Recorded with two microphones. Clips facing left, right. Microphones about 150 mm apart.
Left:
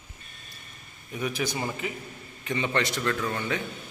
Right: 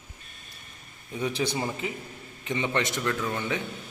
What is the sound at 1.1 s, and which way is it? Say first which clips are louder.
A man's voice: right 2 dB; 25° right (ahead or behind).